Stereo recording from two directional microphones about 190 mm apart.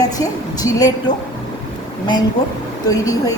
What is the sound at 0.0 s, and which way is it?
A woman's voice, 20° left (ahead or behind).